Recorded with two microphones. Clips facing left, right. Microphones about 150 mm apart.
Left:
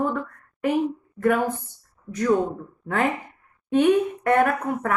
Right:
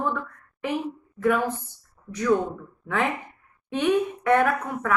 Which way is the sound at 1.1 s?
50° left (ahead or behind).